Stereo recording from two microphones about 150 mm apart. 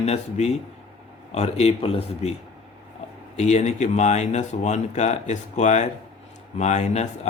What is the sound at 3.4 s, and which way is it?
Speech, 50° left (ahead or behind).